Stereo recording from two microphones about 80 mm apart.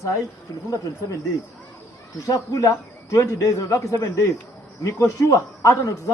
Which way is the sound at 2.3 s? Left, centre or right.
Left.